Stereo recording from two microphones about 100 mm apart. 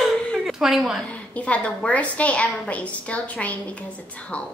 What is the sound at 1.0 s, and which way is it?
A woman's voice, 15° left (ahead or behind).